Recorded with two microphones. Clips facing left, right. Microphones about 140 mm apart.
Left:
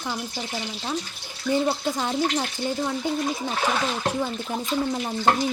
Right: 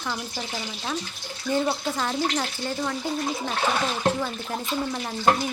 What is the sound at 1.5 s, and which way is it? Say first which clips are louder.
Speech: left 2 dB; 15° left (ahead or behind).